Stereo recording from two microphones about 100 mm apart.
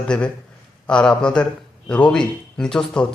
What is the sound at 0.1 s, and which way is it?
A man's voice, 10° left (ahead or behind).